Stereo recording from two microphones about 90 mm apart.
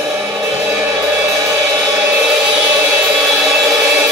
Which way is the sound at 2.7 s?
30° right (ahead or behind).